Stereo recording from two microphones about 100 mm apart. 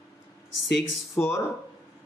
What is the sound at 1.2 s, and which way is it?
Speech, 10° left (ahead or behind).